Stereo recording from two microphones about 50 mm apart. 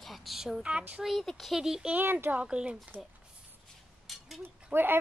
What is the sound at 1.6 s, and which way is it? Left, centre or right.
Speech, centre.